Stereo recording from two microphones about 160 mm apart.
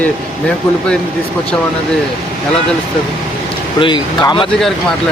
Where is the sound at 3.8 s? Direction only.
30° left (ahead or behind).